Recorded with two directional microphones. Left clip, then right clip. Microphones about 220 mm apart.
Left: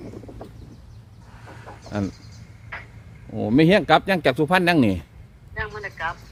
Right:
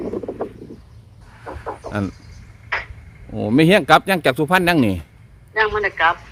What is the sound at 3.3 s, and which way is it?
A man's voice, 25° right (ahead or behind).